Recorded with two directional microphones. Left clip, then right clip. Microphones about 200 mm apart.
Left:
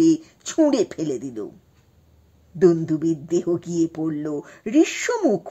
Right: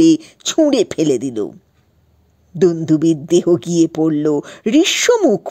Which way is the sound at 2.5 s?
35° right (ahead or behind).